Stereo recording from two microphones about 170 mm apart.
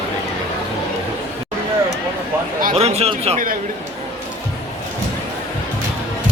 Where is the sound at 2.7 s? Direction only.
35° right (ahead or behind).